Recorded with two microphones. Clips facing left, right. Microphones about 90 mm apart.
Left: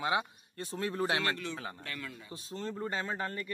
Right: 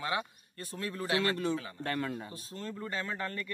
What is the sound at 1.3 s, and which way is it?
Speech, 40° right (ahead or behind).